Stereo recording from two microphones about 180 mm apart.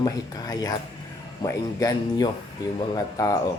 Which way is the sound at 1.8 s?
20° left (ahead or behind).